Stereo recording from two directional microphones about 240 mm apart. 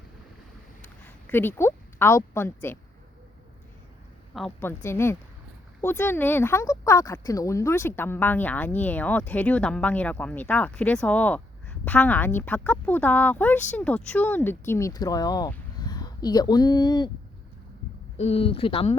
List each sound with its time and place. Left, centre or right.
0.8 s speech: centre
4.4 s speech: centre
18.2 s speech: left